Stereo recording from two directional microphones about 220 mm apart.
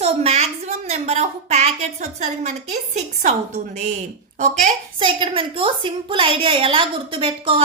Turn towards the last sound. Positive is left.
turn(degrees=-25)  # may be behind; listen again after turning